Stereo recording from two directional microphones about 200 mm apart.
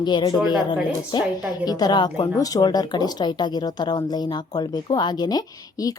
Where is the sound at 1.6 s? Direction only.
20° left (ahead or behind).